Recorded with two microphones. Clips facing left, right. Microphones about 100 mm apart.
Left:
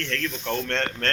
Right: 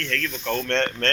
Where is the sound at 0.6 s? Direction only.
5° left (ahead or behind).